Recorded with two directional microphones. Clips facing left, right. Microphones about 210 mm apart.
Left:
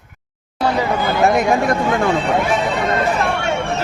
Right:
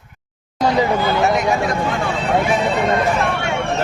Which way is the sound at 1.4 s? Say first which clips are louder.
Left 3 dB; 50° left (ahead or behind).